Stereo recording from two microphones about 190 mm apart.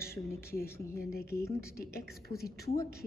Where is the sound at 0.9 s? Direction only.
55° left (ahead or behind).